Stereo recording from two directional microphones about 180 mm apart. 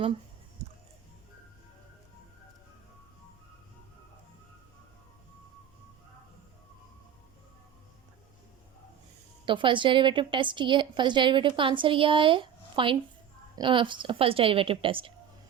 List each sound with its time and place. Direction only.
9.5 s a woman's voice: 25° right (ahead or behind)